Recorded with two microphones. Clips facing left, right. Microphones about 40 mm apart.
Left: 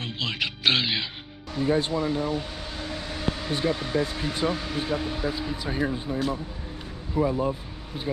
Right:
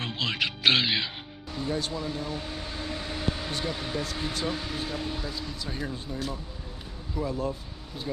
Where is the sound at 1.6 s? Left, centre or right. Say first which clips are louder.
Left 7 dB; left.